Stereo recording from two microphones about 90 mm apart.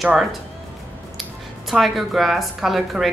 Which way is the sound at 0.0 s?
Centre (ahead or behind).